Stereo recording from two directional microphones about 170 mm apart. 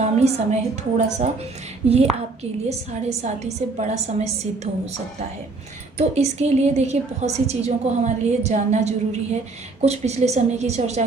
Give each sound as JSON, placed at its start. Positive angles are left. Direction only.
{"t": 0.0, "sound": "a woman's voice", "side_deg": -40}
{"t": 2.6, "sound": "a woman's voice", "side_deg": -40}
{"t": 6.0, "sound": "a woman's voice", "side_deg": -40}